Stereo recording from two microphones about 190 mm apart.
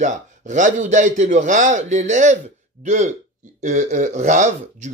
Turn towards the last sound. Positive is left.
turn(degrees=-40)  # may be behind; listen again after turning